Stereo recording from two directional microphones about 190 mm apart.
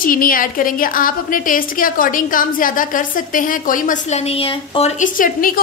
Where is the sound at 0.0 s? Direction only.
50° left (ahead or behind).